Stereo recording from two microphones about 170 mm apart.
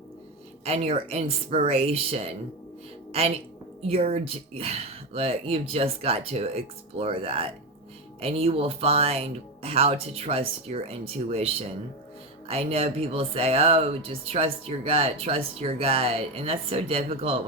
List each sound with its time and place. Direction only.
0.6 s a woman's voice: 40° right (ahead or behind)